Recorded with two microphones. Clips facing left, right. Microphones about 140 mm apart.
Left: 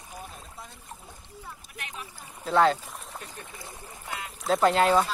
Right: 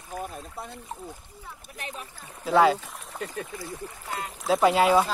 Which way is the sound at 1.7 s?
35° right (ahead or behind).